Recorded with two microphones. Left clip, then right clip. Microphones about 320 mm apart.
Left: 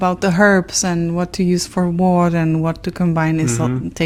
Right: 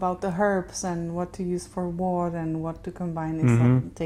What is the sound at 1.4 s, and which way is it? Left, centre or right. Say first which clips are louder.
Speech: left 11 dB; left.